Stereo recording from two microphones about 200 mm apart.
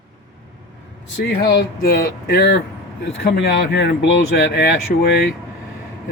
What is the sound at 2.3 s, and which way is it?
Speech, 55° left (ahead or behind).